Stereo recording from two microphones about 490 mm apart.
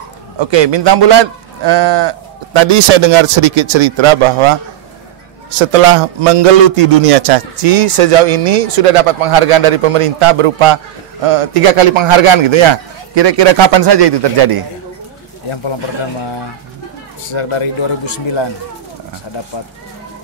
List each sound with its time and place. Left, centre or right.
0.4 s speech: right
5.7 s speech: right
13.1 s speech: right
17.3 s a man's voice: left